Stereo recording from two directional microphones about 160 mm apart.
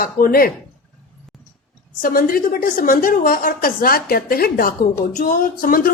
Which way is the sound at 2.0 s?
60° left (ahead or behind).